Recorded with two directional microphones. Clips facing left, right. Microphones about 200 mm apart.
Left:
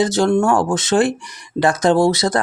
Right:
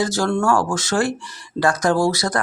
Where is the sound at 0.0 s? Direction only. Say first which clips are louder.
Left 4 dB; 20° left (ahead or behind).